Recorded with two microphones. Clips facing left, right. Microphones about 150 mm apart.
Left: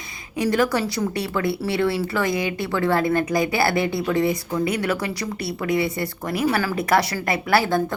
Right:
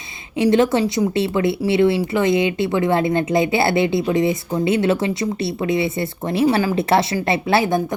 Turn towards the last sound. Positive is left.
turn(degrees=-20)  # may be behind; listen again after turning